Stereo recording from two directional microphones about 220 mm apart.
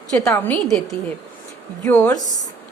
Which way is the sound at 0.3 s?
5° left (ahead or behind).